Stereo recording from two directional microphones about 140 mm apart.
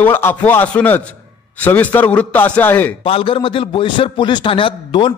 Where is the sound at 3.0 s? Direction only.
40° left (ahead or behind).